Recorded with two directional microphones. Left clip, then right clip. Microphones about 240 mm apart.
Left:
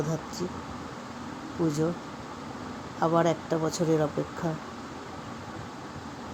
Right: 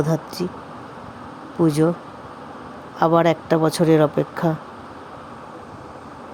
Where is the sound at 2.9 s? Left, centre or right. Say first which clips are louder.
Right 8 dB; right.